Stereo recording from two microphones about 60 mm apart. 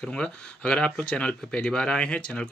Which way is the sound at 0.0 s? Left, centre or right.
Centre.